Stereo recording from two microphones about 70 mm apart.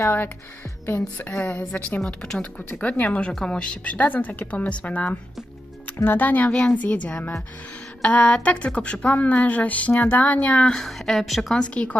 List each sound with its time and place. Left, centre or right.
0.9 s a woman's voice: left
2.0 s a woman's voice: centre
10.8 s a woman's voice: centre
11.7 s a woman's voice: centre